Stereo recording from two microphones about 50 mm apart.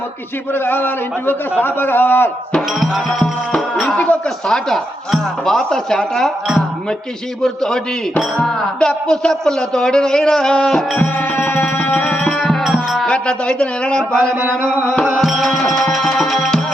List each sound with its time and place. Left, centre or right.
0.5 s a man's voice: left
2.8 s music: centre
3.8 s speech: left
4.4 s a man's voice: centre
7.4 s a man's voice: centre
10.9 s music: left
12.6 s music: centre
13.1 s a man's voice: centre
14.3 s a sound: right
15.0 s music: centre